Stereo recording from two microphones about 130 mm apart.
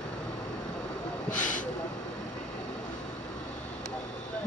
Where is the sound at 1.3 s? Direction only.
75° left (ahead or behind).